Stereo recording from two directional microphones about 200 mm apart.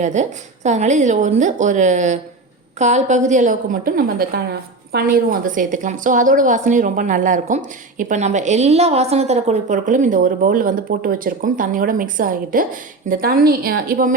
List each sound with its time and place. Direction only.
0.0 s a woman's voice: 35° right (ahead or behind)